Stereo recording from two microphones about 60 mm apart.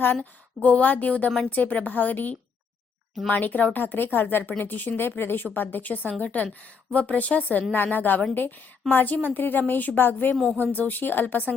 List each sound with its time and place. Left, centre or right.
0.2 s a woman's voice: left